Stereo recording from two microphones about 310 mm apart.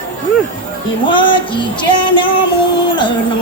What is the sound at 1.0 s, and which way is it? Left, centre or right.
Music, centre.